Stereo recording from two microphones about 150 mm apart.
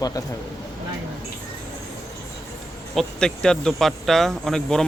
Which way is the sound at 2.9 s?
5° left (ahead or behind).